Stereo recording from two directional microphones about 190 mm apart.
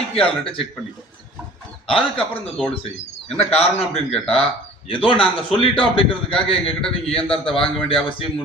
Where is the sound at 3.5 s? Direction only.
30° left (ahead or behind).